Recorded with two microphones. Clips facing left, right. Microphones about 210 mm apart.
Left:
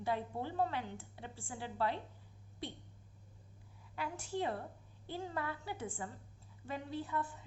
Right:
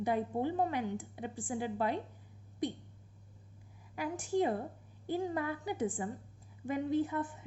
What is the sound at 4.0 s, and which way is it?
A woman's voice, 15° right (ahead or behind).